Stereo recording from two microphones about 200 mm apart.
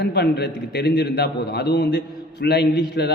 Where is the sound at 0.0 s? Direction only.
55° left (ahead or behind).